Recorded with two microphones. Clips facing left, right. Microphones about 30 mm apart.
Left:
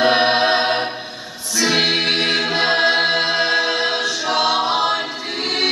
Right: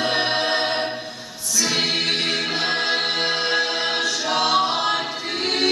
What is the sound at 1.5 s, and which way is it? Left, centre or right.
Music, left.